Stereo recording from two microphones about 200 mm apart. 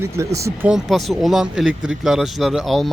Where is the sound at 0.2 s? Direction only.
15° right (ahead or behind).